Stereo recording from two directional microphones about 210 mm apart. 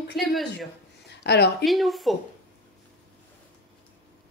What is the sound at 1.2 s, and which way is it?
Speech, 50° left (ahead or behind).